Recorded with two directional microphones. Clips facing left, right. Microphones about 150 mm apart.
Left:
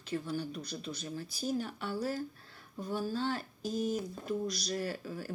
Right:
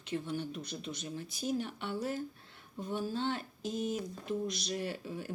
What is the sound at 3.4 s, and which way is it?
A man's voice, 35° left (ahead or behind).